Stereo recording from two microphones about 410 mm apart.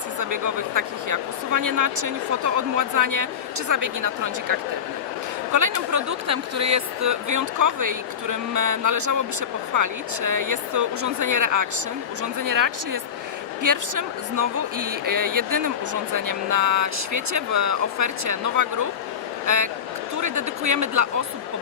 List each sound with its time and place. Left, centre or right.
0.2 s speech: right